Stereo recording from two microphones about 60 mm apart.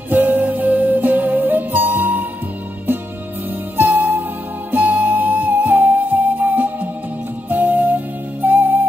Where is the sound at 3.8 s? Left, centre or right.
Right.